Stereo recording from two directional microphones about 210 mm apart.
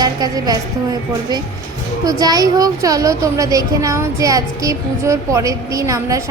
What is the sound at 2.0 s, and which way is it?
A woman's voice, 15° right (ahead or behind).